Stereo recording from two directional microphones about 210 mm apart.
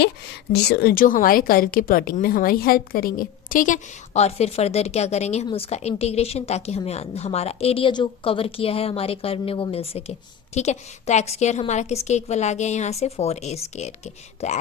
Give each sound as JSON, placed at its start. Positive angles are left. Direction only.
{"t": 0.5, "sound": "a woman's voice", "side_deg": 50}